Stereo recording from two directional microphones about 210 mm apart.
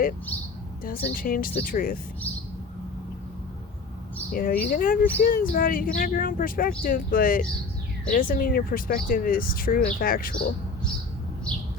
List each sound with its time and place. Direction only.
0.9 s speech: 45° left (ahead or behind)
4.3 s speech: 45° left (ahead or behind)